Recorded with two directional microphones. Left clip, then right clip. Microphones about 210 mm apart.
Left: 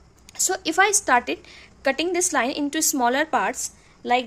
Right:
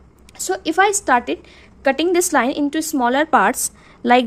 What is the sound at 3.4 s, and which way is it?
Speech, 25° right (ahead or behind).